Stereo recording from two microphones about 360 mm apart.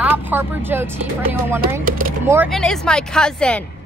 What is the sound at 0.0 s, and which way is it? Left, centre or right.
Speech, centre.